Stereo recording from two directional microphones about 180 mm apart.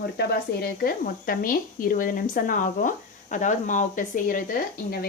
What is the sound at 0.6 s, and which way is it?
Speech, 55° left (ahead or behind).